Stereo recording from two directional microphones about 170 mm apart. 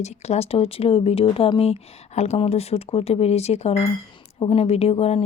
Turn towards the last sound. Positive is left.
turn(degrees=35)  # may be behind; listen again after turning